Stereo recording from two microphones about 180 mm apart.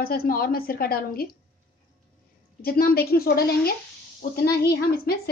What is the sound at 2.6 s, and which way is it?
A woman's voice, 55° left (ahead or behind).